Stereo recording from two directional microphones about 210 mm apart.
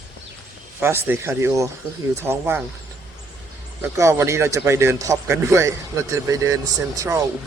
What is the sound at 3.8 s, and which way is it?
Speech, 15° right (ahead or behind).